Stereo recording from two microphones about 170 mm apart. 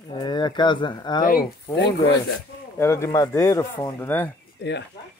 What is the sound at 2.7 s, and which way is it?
Speech, 15° left (ahead or behind).